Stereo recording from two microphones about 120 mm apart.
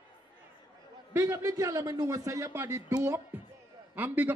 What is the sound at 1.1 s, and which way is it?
A man's voice, 25° right (ahead or behind).